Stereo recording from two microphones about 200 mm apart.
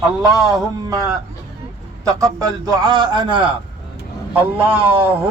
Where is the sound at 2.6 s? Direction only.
20° right (ahead or behind).